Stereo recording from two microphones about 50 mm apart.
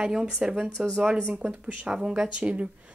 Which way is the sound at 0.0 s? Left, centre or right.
Centre.